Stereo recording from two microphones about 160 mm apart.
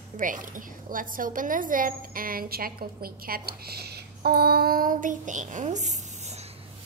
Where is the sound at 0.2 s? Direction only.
55° right (ahead or behind).